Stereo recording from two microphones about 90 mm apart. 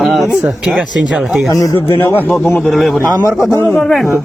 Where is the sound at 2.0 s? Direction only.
25° left (ahead or behind).